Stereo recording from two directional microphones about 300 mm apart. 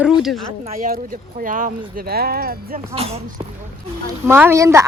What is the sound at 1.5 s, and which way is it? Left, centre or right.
Speech, right.